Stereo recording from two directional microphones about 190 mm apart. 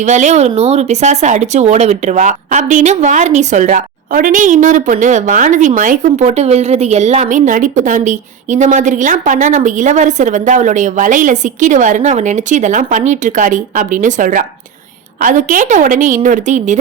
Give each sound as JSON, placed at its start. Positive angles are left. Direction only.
{"t": 0.0, "sound": "a woman's voice", "side_deg": -40}